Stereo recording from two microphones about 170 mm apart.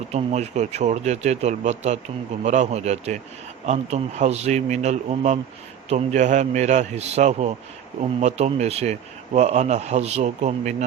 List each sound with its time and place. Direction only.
0.1 s a man's voice: 45° right (ahead or behind)